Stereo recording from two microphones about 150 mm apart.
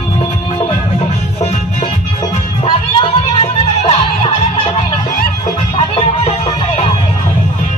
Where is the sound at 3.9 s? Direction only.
35° left (ahead or behind).